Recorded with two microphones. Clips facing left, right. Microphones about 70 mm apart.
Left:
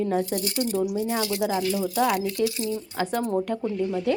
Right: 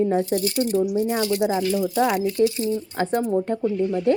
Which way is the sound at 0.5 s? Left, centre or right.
Centre.